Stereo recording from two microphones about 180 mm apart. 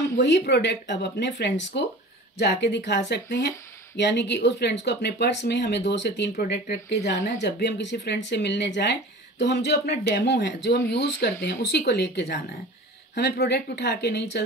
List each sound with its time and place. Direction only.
0.1 s speech: 65° left (ahead or behind)